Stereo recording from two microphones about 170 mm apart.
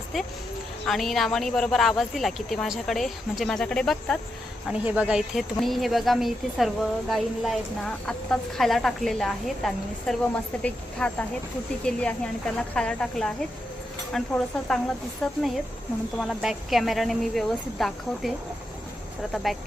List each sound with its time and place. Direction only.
0.9 s speech: centre (ahead or behind)
4.7 s a woman's voice: 5° right (ahead or behind)
19.3 s speech: centre (ahead or behind)